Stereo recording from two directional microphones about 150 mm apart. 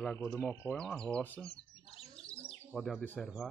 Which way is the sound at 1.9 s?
40° left (ahead or behind).